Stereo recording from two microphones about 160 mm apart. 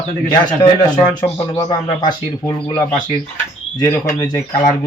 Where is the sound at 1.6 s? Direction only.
25° left (ahead or behind).